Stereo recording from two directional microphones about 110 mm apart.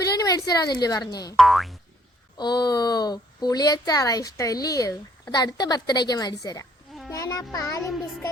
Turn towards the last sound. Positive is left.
turn(degrees=30)  # may be behind; listen again after turning